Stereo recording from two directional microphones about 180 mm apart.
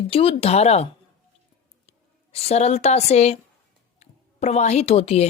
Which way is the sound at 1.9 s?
35° left (ahead or behind).